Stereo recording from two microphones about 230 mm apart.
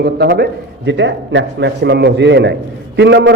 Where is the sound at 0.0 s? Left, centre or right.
Right.